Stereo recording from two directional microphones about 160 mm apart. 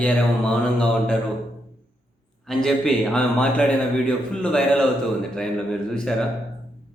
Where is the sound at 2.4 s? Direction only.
Centre (ahead or behind).